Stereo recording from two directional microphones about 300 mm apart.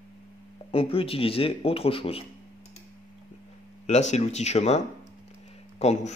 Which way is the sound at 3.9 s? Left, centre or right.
Left.